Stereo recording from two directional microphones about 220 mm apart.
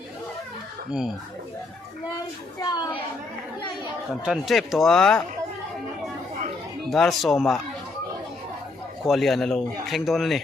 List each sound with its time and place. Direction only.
0.9 s speech: 5° right (ahead or behind)
2.6 s a woman's voice: 20° left (ahead or behind)
4.2 s speech: centre (ahead or behind)
6.9 s speech: centre (ahead or behind)
9.0 s speech: centre (ahead or behind)